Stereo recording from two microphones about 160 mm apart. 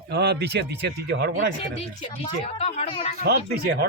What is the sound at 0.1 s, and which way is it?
Speech, 90° right.